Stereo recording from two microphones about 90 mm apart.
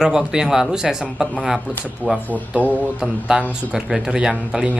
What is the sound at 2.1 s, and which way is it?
Speech, 20° left (ahead or behind).